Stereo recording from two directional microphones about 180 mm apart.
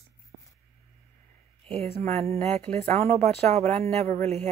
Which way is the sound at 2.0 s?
35° right (ahead or behind).